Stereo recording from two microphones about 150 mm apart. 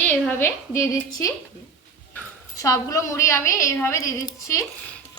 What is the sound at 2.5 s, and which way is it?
A woman's voice, 20° left (ahead or behind).